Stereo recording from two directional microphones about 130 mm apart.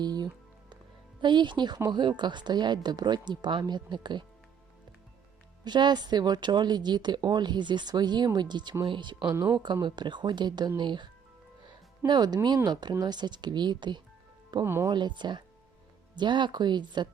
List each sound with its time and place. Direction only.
0.0 s music: 30° right (ahead or behind)
1.2 s a woman's voice: 35° right (ahead or behind)
5.6 s a woman's voice: 35° right (ahead or behind)
9.3 s speech: 20° right (ahead or behind)
9.8 s a woman's voice: 35° right (ahead or behind)
14.6 s speech: 20° right (ahead or behind)
14.9 s a woman's voice: 35° right (ahead or behind)